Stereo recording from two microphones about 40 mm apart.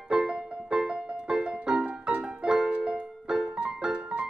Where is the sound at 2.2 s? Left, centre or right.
Centre.